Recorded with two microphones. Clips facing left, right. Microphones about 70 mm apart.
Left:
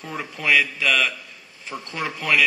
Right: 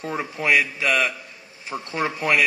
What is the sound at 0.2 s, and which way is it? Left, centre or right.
A man's voice, centre.